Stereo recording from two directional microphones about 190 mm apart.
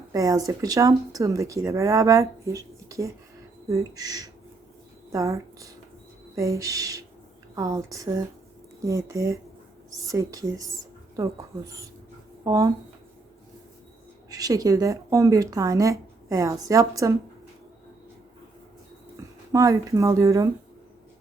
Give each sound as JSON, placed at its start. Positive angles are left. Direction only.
{"t": 0.1, "sound": "speech", "side_deg": -20}
{"t": 14.3, "sound": "speech", "side_deg": -20}
{"t": 19.1, "sound": "speech", "side_deg": -15}